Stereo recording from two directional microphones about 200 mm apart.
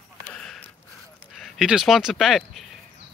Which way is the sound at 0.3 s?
5° left (ahead or behind).